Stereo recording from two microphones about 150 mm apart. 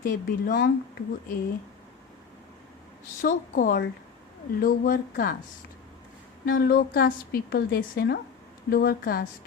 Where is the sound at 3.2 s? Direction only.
65° left (ahead or behind).